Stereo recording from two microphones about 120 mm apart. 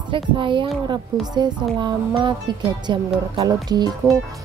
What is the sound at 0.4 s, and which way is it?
A woman's voice, 40° right (ahead or behind).